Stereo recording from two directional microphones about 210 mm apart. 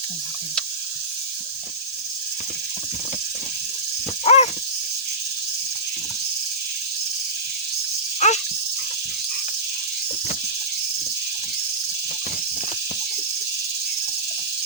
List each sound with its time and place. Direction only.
4.3 s dog: 30° left (ahead or behind)
8.2 s snake: 35° left (ahead or behind)